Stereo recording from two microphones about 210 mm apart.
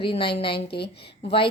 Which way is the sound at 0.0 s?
25° left (ahead or behind).